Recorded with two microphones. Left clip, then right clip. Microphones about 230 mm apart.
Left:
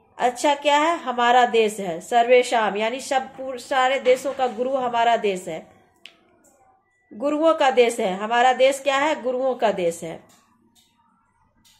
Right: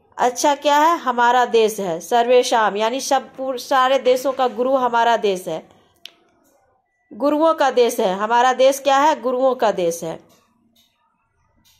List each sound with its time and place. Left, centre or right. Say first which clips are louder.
0.4 s a woman's voice: right 4 dB; right
7.2 s a woman's voice: right 3 dB; right